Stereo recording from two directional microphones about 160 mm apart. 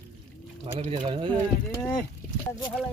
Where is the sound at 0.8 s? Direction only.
45° right (ahead or behind).